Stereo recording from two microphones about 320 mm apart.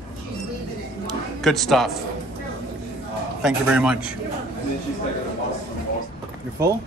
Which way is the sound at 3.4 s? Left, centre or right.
Centre.